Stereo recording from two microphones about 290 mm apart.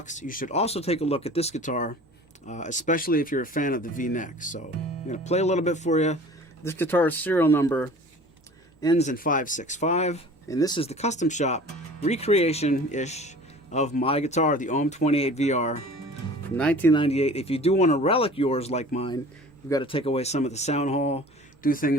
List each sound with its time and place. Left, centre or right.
0.0 s speech: left
6.7 s speech: centre
9.0 s speech: left
16.6 s speech: centre
17.0 s speech: left